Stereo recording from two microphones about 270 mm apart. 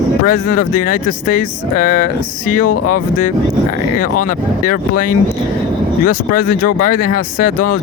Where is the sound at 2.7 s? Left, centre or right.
Left.